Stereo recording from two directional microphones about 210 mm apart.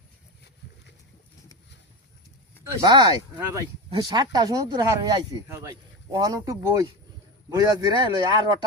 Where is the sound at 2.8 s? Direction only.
20° right (ahead or behind).